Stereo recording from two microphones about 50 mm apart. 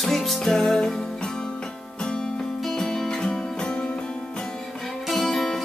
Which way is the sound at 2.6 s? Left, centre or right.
Centre.